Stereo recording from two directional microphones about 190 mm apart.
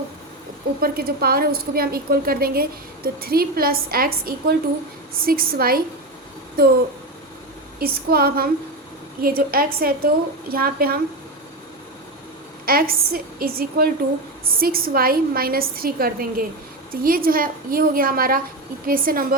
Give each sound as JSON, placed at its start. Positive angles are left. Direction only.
{"t": 0.8, "sound": "a woman's voice", "side_deg": -55}
{"t": 7.8, "sound": "a woman's voice", "side_deg": -55}
{"t": 12.6, "sound": "a woman's voice", "side_deg": -50}